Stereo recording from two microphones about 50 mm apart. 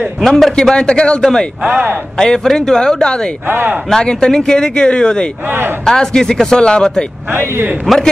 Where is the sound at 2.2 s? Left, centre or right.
Centre.